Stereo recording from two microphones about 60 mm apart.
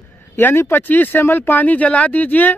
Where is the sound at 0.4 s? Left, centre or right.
Left.